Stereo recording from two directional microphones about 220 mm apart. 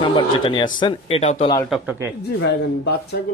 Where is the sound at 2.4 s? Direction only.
50° left (ahead or behind).